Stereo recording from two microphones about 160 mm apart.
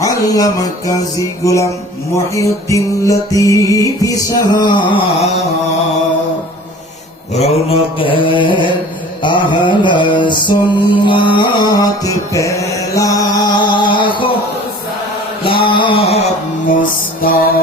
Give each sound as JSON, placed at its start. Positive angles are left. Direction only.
{"t": 0.0, "sound": "mantra", "side_deg": 20}
{"t": 7.3, "sound": "mantra", "side_deg": 40}
{"t": 15.6, "sound": "mantra", "side_deg": 30}
{"t": 16.7, "sound": "music", "side_deg": 65}